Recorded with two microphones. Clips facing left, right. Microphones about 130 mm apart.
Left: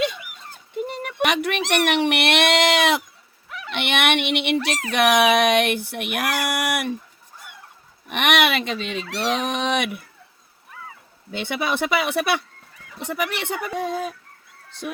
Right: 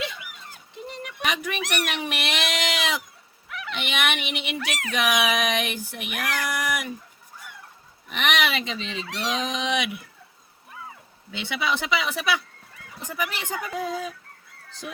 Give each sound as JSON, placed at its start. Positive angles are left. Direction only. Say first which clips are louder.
{"t": 1.0, "sound": "a sound", "louder": "left 6 dB", "side_deg": 70}
{"t": 1.8, "sound": "speech", "louder": "left 9 dB", "side_deg": 65}
{"t": 8.1, "sound": "speech", "louder": "left 5 dB", "side_deg": 70}
{"t": 11.3, "sound": "speech", "louder": "left 3 dB", "side_deg": 50}